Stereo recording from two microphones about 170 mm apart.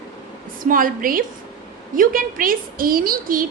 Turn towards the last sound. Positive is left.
turn(degrees=-55)  # may be behind; listen again after turning